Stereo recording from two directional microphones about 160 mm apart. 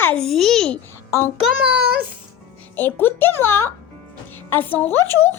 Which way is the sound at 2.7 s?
15° left (ahead or behind).